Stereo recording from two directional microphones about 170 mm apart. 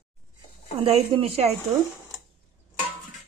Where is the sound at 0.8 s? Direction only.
35° right (ahead or behind).